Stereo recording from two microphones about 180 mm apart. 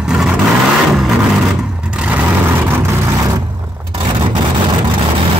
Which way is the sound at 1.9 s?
5° right (ahead or behind).